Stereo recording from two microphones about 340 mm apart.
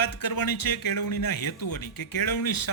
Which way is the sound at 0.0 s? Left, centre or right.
Left.